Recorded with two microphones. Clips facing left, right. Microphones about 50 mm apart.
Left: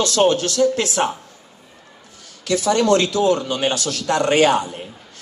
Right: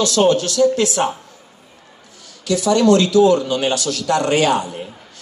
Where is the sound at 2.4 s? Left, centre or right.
Left.